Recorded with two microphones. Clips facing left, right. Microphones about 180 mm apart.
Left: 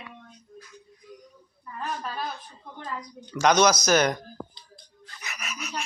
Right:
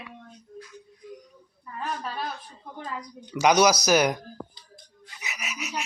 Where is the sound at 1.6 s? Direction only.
5° right (ahead or behind).